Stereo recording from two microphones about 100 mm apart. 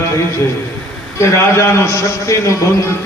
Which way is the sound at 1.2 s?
30° left (ahead or behind).